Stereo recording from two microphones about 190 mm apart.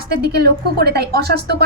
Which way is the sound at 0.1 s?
55° right (ahead or behind).